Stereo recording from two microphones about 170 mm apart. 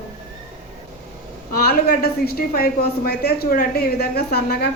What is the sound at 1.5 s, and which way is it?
A woman's voice, 65° left (ahead or behind).